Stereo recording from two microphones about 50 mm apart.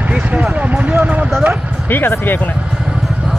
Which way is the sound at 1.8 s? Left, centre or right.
Left.